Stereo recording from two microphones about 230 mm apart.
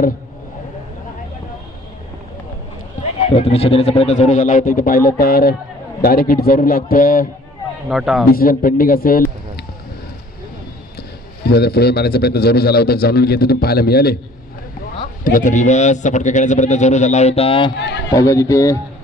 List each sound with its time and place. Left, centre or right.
3.0 s a man's voice: left
7.9 s a man's voice: centre
8.3 s a man's voice: left
11.4 s a man's voice: left
15.2 s a man's voice: left
17.7 s a man's voice: left
18.1 s a man's voice: centre